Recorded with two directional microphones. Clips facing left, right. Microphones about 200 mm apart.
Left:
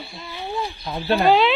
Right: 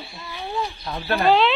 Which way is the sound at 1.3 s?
5° left (ahead or behind).